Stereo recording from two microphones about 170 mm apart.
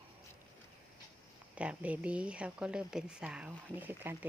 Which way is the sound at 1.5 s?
5° right (ahead or behind).